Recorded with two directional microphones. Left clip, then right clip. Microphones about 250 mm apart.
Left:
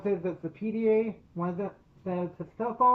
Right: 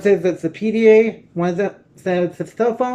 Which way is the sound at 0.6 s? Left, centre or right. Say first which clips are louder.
Right 14 dB; right.